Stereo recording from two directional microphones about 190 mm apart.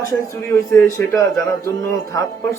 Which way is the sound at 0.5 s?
15° left (ahead or behind).